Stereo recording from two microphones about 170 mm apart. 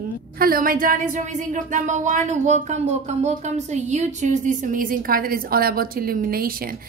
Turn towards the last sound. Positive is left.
turn(degrees=-60)  # may be behind; listen again after turning